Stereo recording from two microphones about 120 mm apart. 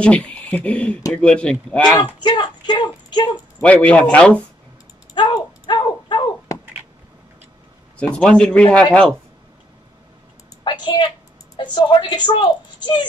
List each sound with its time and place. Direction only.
0.0 s speech: 10° left (ahead or behind)
2.2 s speech: 40° left (ahead or behind)
3.6 s speech: 10° left (ahead or behind)
5.1 s a sound: 40° left (ahead or behind)
8.0 s speech: 10° left (ahead or behind)
10.6 s a woman's voice: 40° left (ahead or behind)